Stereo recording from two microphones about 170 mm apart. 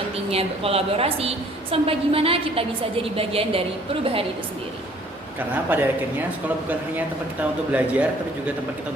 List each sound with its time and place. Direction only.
0.3 s a woman's voice: 35° right (ahead or behind)
5.4 s speech: 10° right (ahead or behind)
7.7 s speech: 10° right (ahead or behind)